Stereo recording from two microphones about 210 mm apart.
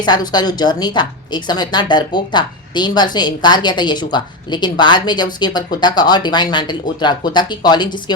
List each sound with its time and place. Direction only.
0.0 s a woman's voice: 20° left (ahead or behind)